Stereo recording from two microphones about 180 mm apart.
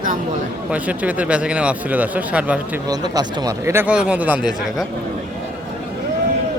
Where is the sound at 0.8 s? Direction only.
10° right (ahead or behind).